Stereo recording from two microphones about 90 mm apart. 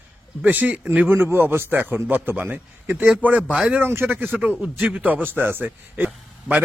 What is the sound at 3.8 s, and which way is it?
A man's voice, 25° right (ahead or behind).